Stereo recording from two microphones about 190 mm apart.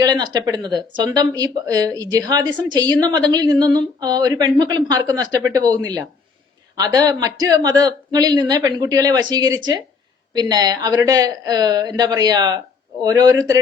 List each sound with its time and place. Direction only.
0.0 s speech: 20° right (ahead or behind)